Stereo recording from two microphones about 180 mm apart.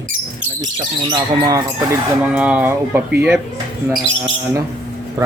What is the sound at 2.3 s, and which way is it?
Speech, 5° right (ahead or behind).